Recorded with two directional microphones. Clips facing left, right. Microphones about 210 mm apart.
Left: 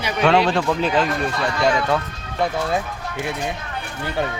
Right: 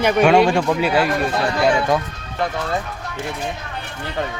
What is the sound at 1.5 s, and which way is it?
Speech, 30° right (ahead or behind).